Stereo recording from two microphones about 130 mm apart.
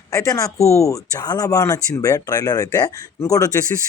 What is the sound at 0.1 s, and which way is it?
Speech, 25° left (ahead or behind).